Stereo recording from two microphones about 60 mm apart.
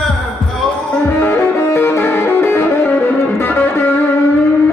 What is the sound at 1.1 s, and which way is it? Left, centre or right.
Music, left.